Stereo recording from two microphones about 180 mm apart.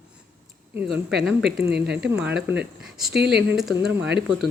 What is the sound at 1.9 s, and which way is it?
Speech, 5° right (ahead or behind).